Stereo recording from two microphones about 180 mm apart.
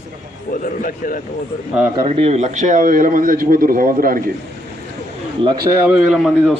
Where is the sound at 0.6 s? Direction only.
50° left (ahead or behind).